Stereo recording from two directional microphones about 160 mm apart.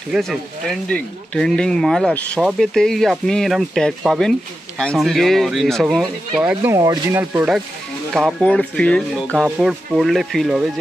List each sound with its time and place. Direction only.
0.1 s speech: centre (ahead or behind)
6.8 s speech: 25° right (ahead or behind)
7.2 s speech: 5° right (ahead or behind)